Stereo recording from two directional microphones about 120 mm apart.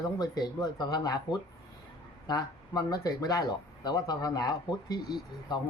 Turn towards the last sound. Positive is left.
turn(degrees=35)  # may be behind; listen again after turning